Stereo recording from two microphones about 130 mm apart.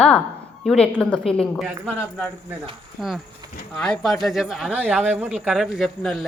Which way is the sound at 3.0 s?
5° left (ahead or behind).